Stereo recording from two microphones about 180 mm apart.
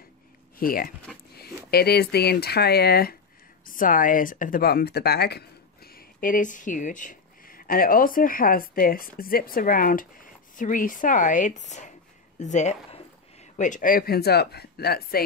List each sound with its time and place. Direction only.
0.6 s speech: 55° left (ahead or behind)